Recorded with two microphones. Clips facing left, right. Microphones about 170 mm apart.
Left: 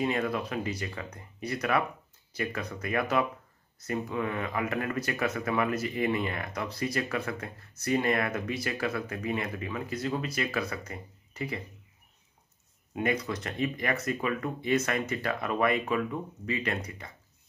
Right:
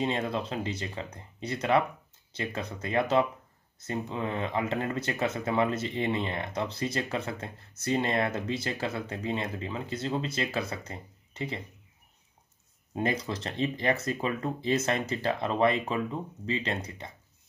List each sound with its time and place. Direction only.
0.0 s speech: 25° right (ahead or behind)
12.9 s speech: 30° right (ahead or behind)